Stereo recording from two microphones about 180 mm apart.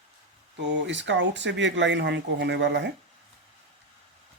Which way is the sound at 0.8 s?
85° right.